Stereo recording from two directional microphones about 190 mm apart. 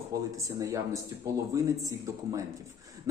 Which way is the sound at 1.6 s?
15° right (ahead or behind).